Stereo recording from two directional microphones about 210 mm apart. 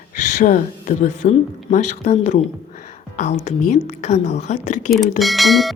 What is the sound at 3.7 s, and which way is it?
Speech, 30° left (ahead or behind).